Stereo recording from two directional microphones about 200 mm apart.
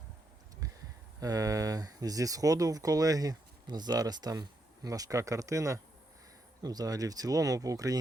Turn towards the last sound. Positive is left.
turn(degrees=-15)  # may be behind; listen again after turning